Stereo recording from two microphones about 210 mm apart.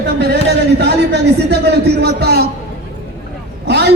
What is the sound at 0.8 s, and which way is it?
A man's voice, 55° right (ahead or behind).